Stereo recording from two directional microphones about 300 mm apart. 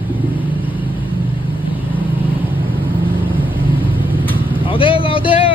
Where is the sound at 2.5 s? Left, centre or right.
Centre.